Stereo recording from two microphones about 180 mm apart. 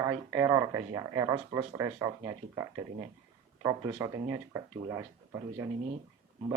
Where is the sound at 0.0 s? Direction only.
15° right (ahead or behind).